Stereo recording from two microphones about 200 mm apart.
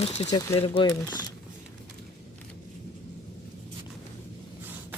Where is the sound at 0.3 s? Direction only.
20° left (ahead or behind).